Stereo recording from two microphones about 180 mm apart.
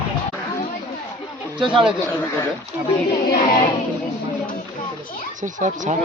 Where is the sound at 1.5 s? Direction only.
25° right (ahead or behind).